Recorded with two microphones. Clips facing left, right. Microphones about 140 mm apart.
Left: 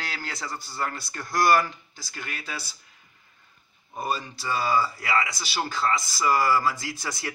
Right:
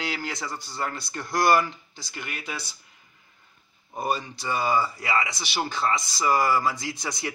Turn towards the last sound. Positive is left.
turn(degrees=-20)  # may be behind; listen again after turning